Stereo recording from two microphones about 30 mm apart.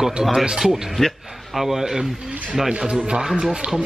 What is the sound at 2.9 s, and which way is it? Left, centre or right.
Speech, right.